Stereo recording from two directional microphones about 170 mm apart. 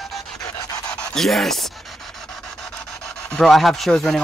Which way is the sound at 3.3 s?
Centre (ahead or behind).